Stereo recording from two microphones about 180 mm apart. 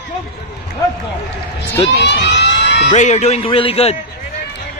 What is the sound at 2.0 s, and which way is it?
Crowd, 70° left (ahead or behind).